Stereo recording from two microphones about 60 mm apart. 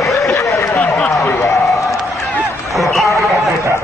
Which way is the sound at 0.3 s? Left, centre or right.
Left.